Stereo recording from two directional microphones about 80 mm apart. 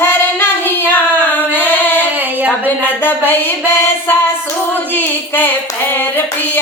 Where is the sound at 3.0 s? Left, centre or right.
Left.